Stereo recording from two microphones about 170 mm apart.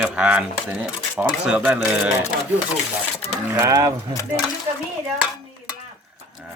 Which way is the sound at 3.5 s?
20° right (ahead or behind).